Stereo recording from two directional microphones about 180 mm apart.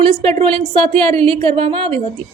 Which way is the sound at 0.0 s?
30° right (ahead or behind).